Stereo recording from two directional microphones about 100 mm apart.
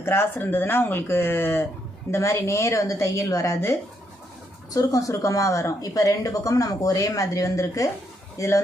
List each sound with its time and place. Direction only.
0.0 s a woman's voice: 25° left (ahead or behind)